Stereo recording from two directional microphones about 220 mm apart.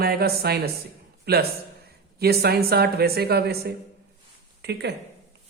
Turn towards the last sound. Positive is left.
turn(degrees=-50)  # may be behind; listen again after turning